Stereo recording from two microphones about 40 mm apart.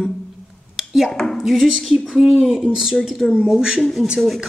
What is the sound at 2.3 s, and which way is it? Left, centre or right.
Speech, centre.